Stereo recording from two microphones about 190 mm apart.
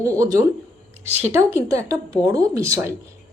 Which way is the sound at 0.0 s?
15° right (ahead or behind).